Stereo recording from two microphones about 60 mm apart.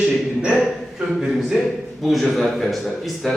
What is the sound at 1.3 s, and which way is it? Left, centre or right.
A man's voice, centre.